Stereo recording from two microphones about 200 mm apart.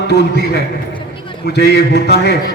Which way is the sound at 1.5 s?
55° left (ahead or behind).